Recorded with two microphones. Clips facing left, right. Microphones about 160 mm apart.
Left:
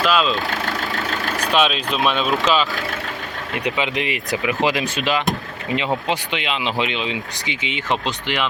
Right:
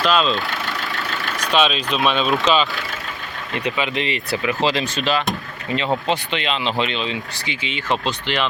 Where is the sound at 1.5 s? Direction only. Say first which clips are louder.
Right 1 dB; 5° left (ahead or behind).